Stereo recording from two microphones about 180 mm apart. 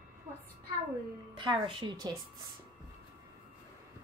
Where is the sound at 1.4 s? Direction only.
25° right (ahead or behind).